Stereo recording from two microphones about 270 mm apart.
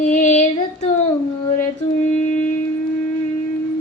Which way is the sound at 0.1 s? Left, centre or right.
Left.